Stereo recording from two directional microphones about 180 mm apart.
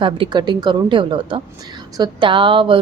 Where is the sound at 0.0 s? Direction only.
25° right (ahead or behind).